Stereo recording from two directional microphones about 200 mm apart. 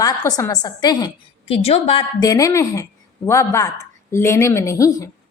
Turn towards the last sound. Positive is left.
turn(degrees=15)  # may be behind; listen again after turning